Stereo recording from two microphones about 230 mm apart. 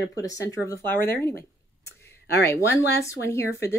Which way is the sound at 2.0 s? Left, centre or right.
Left.